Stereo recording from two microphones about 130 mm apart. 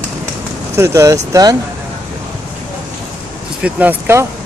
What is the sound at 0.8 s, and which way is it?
Speech, 25° right (ahead or behind).